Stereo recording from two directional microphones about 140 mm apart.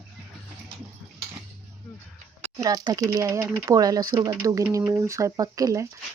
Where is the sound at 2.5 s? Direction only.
25° right (ahead or behind).